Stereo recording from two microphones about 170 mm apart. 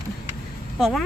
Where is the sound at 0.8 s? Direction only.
Centre (ahead or behind).